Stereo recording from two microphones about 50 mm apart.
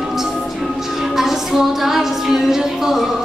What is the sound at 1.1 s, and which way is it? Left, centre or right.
Music, centre.